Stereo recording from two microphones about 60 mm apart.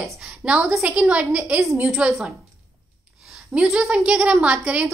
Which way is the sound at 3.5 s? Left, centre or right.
Centre.